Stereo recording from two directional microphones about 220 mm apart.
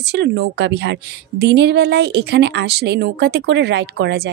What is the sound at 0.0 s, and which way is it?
A woman's voice, 50° right (ahead or behind).